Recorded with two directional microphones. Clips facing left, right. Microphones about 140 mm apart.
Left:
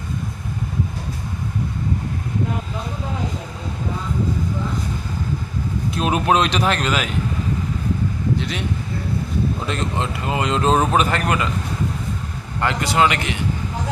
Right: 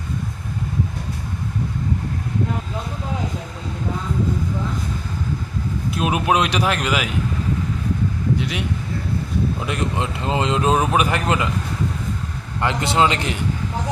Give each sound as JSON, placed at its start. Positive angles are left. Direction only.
{"t": 5.9, "sound": "speech", "side_deg": -10}
{"t": 8.4, "sound": "speech", "side_deg": -10}
{"t": 9.6, "sound": "speech", "side_deg": -10}
{"t": 10.2, "sound": "a man's voice", "side_deg": -25}
{"t": 10.6, "sound": "speech", "side_deg": -10}
{"t": 12.5, "sound": "a man's voice", "side_deg": -20}